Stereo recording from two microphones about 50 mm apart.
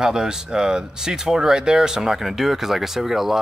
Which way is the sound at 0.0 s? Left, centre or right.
Centre.